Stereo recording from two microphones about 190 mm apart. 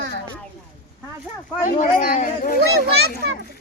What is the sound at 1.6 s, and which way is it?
Speech, 45° left (ahead or behind).